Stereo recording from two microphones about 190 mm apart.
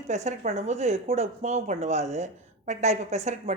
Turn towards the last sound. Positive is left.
turn(degrees=-35)  # may be behind; listen again after turning